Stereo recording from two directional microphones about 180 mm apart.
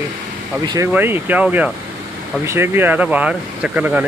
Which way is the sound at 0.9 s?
10° right (ahead or behind).